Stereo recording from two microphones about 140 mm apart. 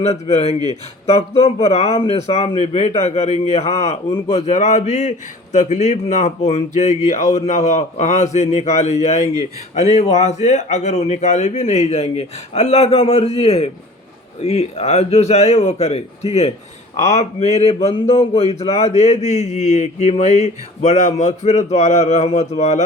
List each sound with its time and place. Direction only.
0.0 s a man's voice: 50° left (ahead or behind)